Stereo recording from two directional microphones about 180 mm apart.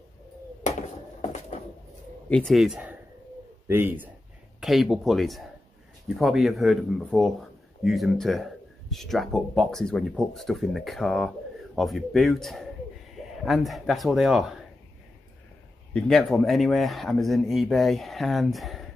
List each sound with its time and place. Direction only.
2.2 s speech: 5° left (ahead or behind)
15.9 s speech: centre (ahead or behind)